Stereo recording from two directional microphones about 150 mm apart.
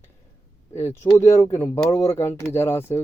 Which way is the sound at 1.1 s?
20° left (ahead or behind).